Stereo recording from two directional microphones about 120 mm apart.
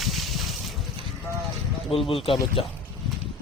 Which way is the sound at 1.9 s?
50° left (ahead or behind).